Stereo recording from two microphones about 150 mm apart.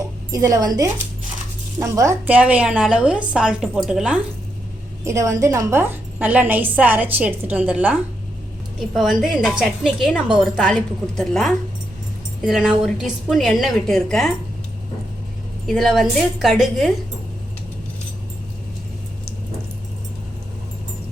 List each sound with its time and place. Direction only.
0.3 s a woman's voice: 25° right (ahead or behind)
2.2 s a woman's voice: 10° right (ahead or behind)
5.0 s a woman's voice: 20° right (ahead or behind); by 14.3 s centre (ahead or behind)
15.6 s a woman's voice: centre (ahead or behind)